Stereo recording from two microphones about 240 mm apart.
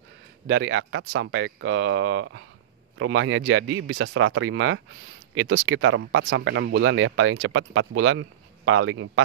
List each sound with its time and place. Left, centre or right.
0.5 s speech: right